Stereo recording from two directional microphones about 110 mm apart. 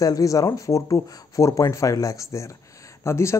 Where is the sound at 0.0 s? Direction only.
30° left (ahead or behind).